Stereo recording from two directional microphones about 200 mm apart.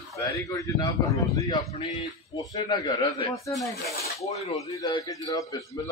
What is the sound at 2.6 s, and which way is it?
Speech, 20° left (ahead or behind).